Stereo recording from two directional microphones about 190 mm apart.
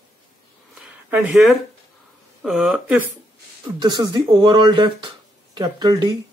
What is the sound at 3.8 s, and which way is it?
Speech, 20° right (ahead or behind).